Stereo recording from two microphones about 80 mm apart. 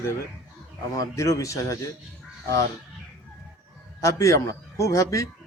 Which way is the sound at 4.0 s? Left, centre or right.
Left.